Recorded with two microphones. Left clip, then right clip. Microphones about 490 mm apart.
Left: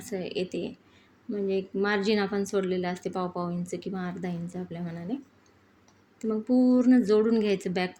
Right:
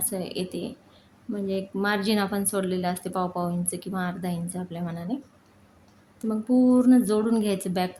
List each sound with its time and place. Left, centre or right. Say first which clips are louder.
0.0 s speech: right 1 dB; right
6.2 s speech: right 2 dB; right